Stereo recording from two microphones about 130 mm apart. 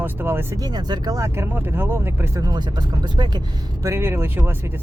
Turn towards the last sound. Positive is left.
turn(degrees=-20)  # may be behind; listen again after turning